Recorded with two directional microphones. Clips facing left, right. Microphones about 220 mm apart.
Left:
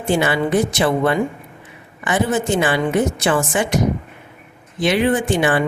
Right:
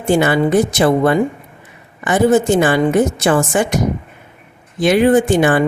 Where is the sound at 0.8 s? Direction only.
45° right (ahead or behind).